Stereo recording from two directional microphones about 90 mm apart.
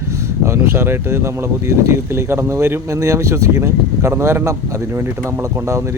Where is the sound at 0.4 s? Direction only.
30° right (ahead or behind).